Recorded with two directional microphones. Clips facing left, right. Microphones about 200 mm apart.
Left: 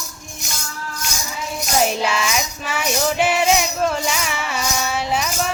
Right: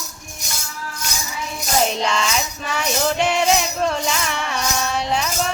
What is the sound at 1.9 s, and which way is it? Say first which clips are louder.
Music: even; 5° left (ahead or behind).